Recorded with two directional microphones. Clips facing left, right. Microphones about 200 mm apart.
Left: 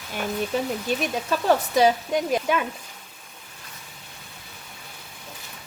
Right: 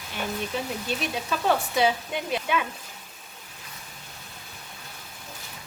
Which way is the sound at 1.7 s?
40° left (ahead or behind).